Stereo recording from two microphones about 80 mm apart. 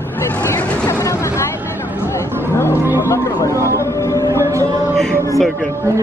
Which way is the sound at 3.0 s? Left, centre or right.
Left.